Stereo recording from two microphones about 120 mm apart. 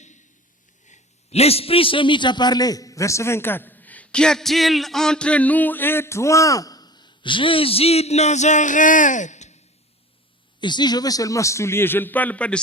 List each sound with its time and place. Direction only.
0.9 s a man's voice: 70° left (ahead or behind)
10.6 s a man's voice: 40° left (ahead or behind); by 12.6 s 10° left (ahead or behind)